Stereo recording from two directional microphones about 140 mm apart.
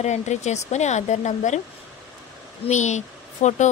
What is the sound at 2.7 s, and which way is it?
A child's voice, 55° left (ahead or behind).